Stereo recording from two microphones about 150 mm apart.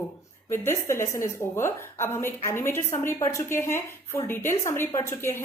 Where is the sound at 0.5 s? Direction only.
15° left (ahead or behind).